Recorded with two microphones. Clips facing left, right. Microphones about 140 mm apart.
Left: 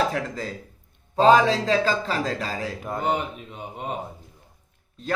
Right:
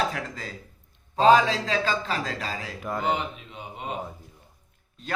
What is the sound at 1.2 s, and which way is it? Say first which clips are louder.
Speech: left 2 dB; 35° left (ahead or behind).